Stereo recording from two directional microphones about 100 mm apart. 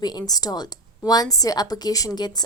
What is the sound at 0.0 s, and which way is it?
A woman's voice, 45° left (ahead or behind).